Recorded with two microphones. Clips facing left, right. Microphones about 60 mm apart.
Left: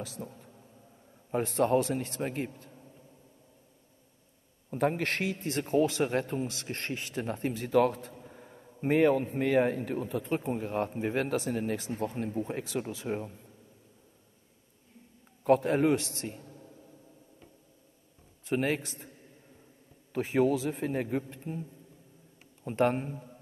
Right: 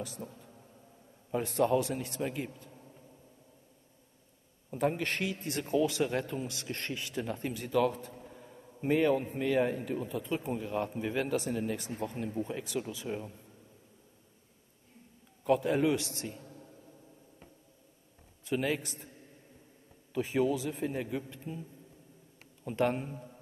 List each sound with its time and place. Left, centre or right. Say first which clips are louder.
0.2 s speech: left 2 dB; centre
1.3 s speech: left 2 dB; left
4.6 s speech: left 2 dB; left
15.4 s speech: left 3 dB; left
18.4 s speech: left 2 dB; left
20.1 s speech: left 3 dB; left